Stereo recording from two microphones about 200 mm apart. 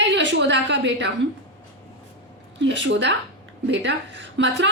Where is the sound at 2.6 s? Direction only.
65° right (ahead or behind).